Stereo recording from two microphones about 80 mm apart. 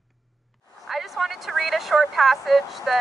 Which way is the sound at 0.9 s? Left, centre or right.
Centre.